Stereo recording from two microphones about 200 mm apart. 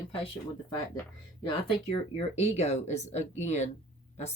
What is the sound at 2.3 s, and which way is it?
Speech, 30° left (ahead or behind).